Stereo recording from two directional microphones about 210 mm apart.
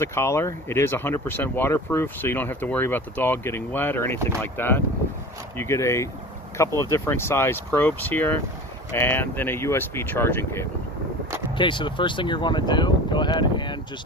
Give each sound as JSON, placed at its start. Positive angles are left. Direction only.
{"t": 0.0, "sound": "speech", "side_deg": 10}
{"t": 11.5, "sound": "speech", "side_deg": 20}